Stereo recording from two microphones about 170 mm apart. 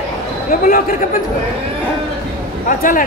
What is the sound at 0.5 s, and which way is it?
Speech, 55° left (ahead or behind).